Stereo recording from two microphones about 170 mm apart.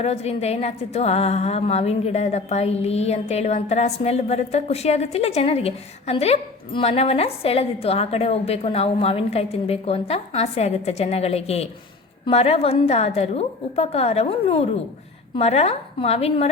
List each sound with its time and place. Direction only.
0.0 s a woman's voice: 35° left (ahead or behind)